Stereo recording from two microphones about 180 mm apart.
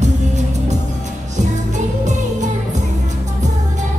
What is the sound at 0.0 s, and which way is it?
Music, 40° right (ahead or behind).